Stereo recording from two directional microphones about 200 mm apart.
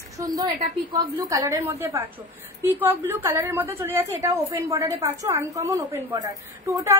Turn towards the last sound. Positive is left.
turn(degrees=-15)  # may be behind; listen again after turning